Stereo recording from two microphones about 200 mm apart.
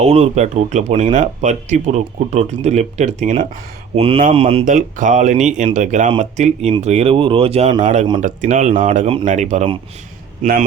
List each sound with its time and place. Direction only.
0.0 s a man's voice: 35° right (ahead or behind)